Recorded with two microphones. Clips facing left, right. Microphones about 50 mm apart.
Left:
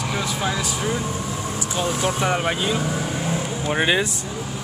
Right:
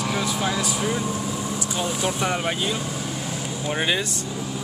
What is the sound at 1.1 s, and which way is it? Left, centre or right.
Vehicle, left.